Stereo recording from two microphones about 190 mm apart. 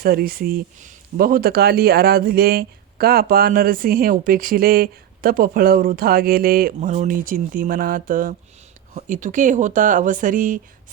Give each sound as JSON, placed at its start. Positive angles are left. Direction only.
{"t": 0.0, "sound": "speech", "side_deg": -50}